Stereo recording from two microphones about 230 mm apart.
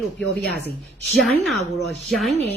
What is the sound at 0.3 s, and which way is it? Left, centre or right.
Speech, right.